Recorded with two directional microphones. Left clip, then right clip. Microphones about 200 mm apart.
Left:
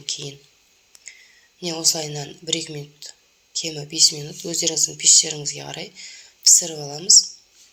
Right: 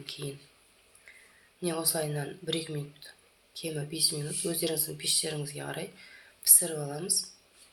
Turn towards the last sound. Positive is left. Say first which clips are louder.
# left 17 dB
turn(degrees=30)  # may be behind; listen again after turning